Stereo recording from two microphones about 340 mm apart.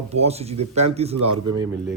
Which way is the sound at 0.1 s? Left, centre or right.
Centre.